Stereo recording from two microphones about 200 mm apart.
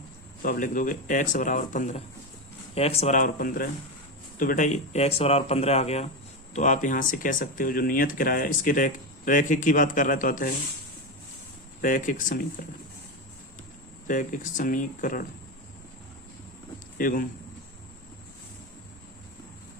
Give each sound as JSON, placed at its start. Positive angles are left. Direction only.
{"t": 0.4, "sound": "speech", "side_deg": 45}
{"t": 11.8, "sound": "speech", "side_deg": 40}
{"t": 14.1, "sound": "speech", "side_deg": 40}
{"t": 17.0, "sound": "speech", "side_deg": 45}